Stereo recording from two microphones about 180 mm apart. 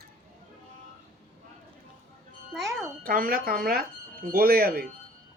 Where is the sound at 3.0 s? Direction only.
50° right (ahead or behind).